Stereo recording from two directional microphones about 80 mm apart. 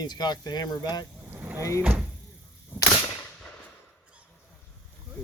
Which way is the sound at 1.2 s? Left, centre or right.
Right.